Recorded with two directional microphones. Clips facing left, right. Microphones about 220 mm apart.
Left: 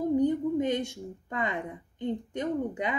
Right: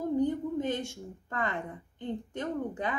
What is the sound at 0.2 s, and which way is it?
A woman's voice, 15° left (ahead or behind).